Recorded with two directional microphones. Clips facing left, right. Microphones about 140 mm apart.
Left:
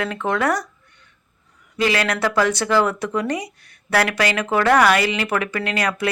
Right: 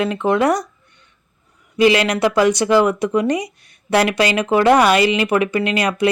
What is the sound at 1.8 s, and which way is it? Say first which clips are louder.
Speech: right 6 dB; 20° right (ahead or behind).